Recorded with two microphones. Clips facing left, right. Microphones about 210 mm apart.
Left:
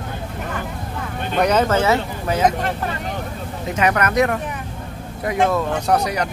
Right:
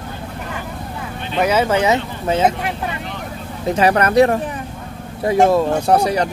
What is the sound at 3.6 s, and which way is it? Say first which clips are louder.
Speech: right 4 dB; 30° right (ahead or behind).